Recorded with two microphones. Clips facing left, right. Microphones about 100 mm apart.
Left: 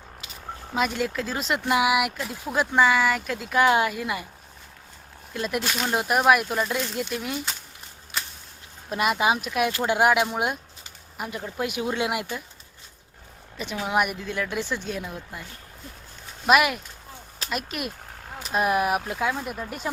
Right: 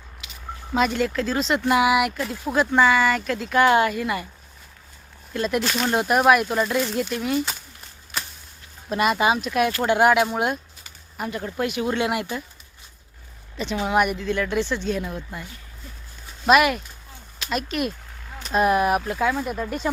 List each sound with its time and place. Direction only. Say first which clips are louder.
0.2 s a sound: right 1 dB; 35° left (ahead or behind)
0.8 s speech: right 4 dB; 5° left (ahead or behind)
5.3 s speech: right 4 dB; 5° left (ahead or behind)
8.9 s speech: right 3 dB; 5° left (ahead or behind)
13.8 s speech: right 3 dB; 10° left (ahead or behind)
16.5 s speech: right 3 dB; 5° left (ahead or behind)